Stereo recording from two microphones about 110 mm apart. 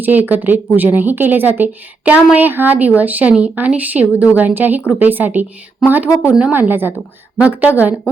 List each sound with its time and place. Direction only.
0.0 s a woman's voice: 15° right (ahead or behind)